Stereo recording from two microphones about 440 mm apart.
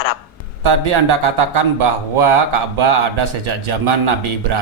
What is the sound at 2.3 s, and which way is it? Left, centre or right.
A man's voice, right.